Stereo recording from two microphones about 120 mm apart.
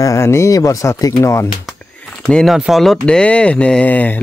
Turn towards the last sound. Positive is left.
turn(degrees=15)  # may be behind; listen again after turning